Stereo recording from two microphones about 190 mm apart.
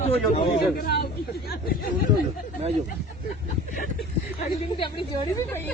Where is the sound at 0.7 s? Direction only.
50° left (ahead or behind).